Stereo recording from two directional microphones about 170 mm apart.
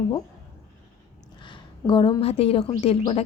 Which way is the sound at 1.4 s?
30° left (ahead or behind).